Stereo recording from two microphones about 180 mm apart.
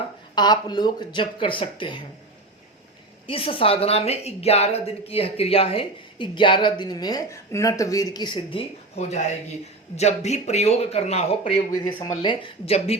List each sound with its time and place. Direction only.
0.3 s a woman's voice: 25° left (ahead or behind)
3.2 s a woman's voice: 30° left (ahead or behind)